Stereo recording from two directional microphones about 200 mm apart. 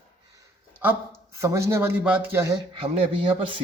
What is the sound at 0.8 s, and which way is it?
A woman's voice, 10° right (ahead or behind).